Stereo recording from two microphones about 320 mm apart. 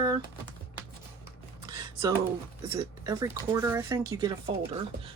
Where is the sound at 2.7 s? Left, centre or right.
Centre.